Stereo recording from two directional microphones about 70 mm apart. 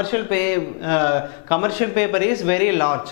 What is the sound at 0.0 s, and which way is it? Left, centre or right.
A woman's voice, centre.